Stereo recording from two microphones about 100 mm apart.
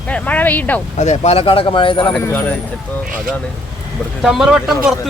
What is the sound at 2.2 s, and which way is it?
Speech, 20° left (ahead or behind).